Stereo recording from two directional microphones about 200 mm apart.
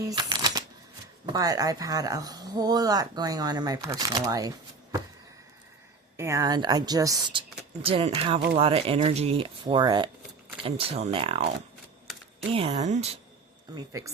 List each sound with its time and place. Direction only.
0.1 s shuffling cards: 20° right (ahead or behind)
1.3 s speech: 20° right (ahead or behind)
6.1 s speech: 15° right (ahead or behind)
12.5 s speech: 30° right (ahead or behind)
13.7 s speech: 15° right (ahead or behind)